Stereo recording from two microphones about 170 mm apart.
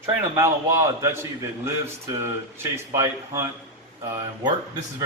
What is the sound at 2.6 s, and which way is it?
Speech, 15° right (ahead or behind).